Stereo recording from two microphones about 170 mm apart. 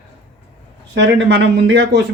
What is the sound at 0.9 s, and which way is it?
Speech, 90° right.